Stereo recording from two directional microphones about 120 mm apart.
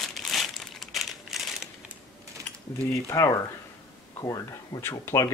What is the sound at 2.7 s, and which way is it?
Speech, 25° left (ahead or behind).